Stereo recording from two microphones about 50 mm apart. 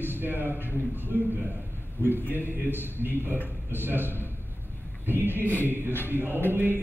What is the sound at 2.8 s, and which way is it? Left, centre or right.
A man's voice, right.